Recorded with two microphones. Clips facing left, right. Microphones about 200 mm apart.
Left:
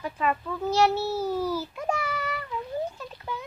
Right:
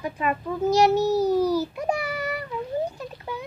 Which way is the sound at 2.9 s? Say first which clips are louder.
Right 3 dB; 15° right (ahead or behind).